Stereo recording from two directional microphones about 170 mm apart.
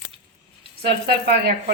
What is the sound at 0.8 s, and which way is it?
Speech, 80° right.